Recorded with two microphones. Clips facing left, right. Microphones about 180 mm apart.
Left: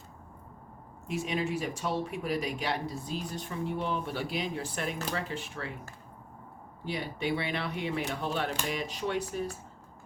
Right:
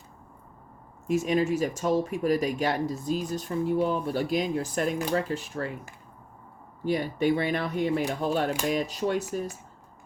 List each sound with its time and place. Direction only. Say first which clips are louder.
1.0 s speech: right 7 dB; 45° right (ahead or behind)
6.8 s speech: right 8 dB; 45° right (ahead or behind)